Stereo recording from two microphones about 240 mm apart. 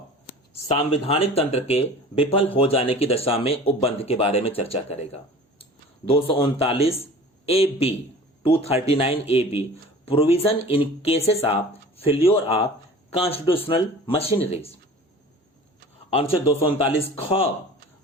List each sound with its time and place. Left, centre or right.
0.7 s speech: left
16.0 s speech: left